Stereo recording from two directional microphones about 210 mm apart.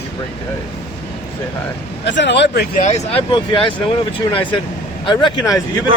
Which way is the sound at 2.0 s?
55° left (ahead or behind).